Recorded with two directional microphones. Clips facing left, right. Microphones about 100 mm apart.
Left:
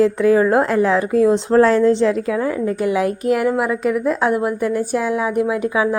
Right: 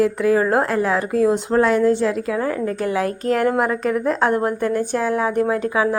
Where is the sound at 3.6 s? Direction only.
40° right (ahead or behind).